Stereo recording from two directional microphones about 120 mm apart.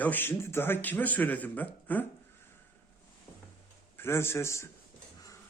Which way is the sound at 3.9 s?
20° left (ahead or behind).